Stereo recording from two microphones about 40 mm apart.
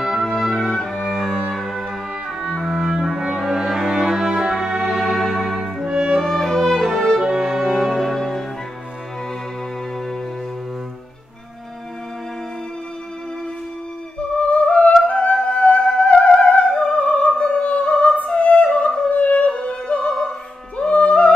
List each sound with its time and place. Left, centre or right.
0.2 s music: centre
2.7 s music: centre
4.8 s music: centre
6.1 s music: centre
7.2 s music: centre
7.4 s music: centre
14.5 s music: left
18.3 s opera: left
19.0 s music: left